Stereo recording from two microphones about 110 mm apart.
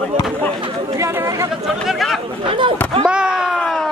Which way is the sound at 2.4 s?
50° right (ahead or behind).